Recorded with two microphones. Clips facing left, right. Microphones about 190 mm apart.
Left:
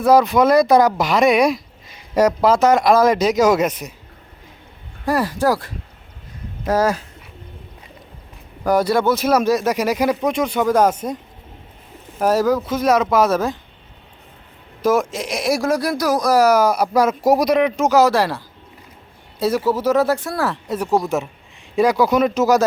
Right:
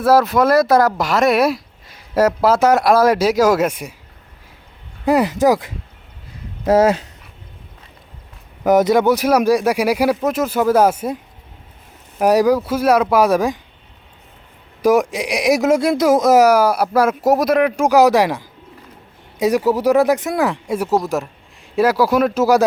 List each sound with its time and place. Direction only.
0.0 s speech: 5° right (ahead or behind)
5.0 s speech: 20° right (ahead or behind)
8.6 s speech: 20° right (ahead or behind)
12.2 s speech: 15° right (ahead or behind)
14.8 s speech: 15° right (ahead or behind)
16.5 s speech: 10° right (ahead or behind)